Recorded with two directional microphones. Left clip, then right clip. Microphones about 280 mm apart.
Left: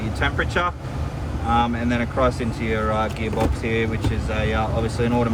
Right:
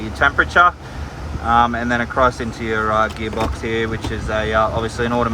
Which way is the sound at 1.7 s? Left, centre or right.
Left.